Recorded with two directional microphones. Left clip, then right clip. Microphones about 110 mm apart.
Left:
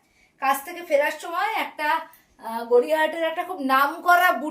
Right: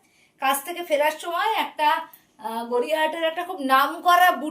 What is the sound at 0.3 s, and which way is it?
A woman's voice, 10° left (ahead or behind).